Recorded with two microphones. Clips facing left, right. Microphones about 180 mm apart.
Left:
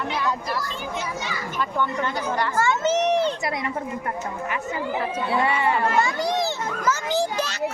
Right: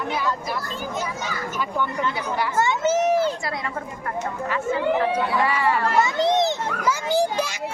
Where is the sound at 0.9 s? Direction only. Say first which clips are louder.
Right 1 dB; 40° right (ahead or behind).